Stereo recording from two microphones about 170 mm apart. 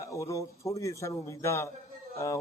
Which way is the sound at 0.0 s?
20° left (ahead or behind).